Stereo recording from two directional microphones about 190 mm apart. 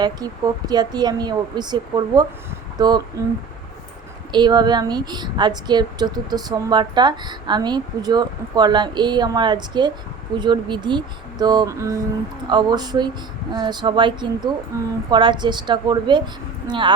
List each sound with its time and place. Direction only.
0.7 s a woman's voice: 20° right (ahead or behind)
4.3 s a woman's voice: 25° right (ahead or behind)